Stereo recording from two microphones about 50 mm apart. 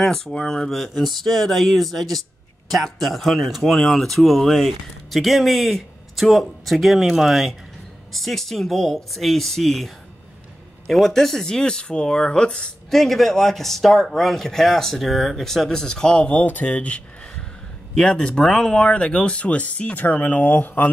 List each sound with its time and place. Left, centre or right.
0.0 s speech: centre
12.9 s speech: centre
16.4 s speech: left